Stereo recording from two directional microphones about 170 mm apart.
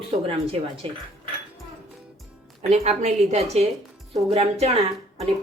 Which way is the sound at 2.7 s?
40° right (ahead or behind).